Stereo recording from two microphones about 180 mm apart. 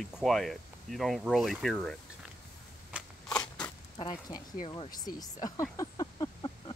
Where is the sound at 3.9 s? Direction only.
25° left (ahead or behind).